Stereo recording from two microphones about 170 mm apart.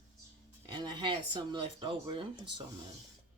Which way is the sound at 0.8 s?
25° right (ahead or behind).